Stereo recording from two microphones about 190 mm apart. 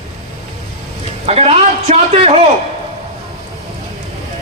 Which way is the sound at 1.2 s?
35° right (ahead or behind).